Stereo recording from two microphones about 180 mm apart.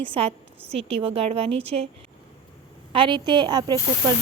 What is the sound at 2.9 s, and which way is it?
Speech, 25° right (ahead or behind).